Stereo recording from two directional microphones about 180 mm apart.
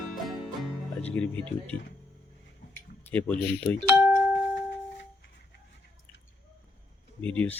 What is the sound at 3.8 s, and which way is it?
Music, 10° right (ahead or behind).